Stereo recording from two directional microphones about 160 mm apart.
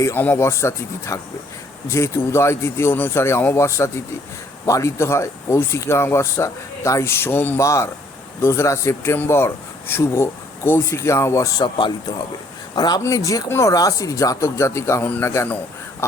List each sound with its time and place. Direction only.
0.0 s a man's voice: 15° left (ahead or behind)